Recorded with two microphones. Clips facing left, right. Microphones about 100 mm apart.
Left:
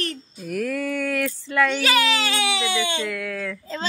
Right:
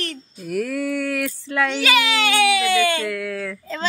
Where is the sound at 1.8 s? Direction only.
40° left (ahead or behind).